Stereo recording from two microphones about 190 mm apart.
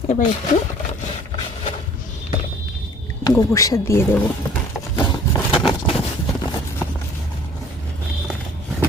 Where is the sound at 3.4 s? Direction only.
20° left (ahead or behind).